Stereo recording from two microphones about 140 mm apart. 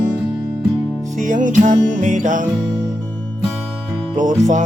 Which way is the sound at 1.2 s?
65° right (ahead or behind).